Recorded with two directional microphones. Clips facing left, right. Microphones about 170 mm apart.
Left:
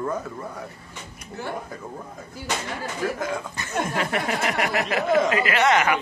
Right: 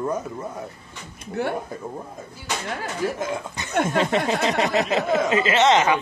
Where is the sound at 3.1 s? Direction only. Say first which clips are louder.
Right 1 dB; 20° right (ahead or behind).